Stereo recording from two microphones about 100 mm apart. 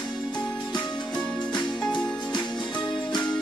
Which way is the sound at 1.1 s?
5° left (ahead or behind).